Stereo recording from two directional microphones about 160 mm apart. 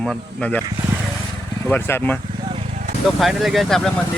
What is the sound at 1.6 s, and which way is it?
Speech, 10° left (ahead or behind).